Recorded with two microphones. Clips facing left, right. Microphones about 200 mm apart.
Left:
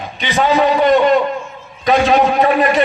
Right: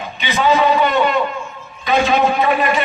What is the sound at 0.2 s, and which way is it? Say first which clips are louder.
Speech: left 1 dB; 45° left (ahead or behind).